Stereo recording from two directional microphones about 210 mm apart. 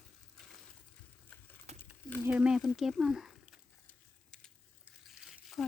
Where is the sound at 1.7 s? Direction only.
30° right (ahead or behind).